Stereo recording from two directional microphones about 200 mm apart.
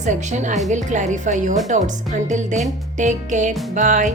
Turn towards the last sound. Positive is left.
turn(degrees=-40)  # may be behind; listen again after turning